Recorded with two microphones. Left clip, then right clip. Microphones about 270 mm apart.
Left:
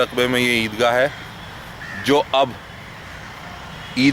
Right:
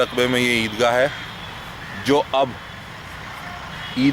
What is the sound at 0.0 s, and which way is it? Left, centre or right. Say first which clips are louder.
Speech: left 1 dB; centre.